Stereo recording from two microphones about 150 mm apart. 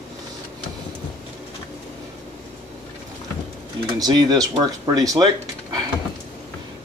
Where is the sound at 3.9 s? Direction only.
25° right (ahead or behind).